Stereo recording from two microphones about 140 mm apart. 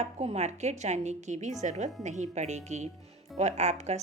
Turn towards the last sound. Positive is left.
turn(degrees=-55)  # may be behind; listen again after turning